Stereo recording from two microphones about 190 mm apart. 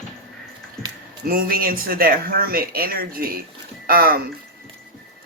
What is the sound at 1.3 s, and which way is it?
Speech, 50° right (ahead or behind).